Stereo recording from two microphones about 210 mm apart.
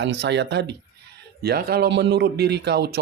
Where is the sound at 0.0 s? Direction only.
55° right (ahead or behind).